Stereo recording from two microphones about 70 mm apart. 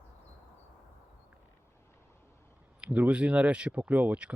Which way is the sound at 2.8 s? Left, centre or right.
Centre.